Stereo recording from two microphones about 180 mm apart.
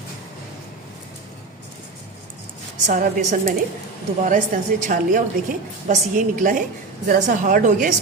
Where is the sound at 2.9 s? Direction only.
45° right (ahead or behind).